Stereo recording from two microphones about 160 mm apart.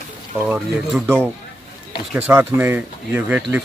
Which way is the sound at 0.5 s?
10° right (ahead or behind).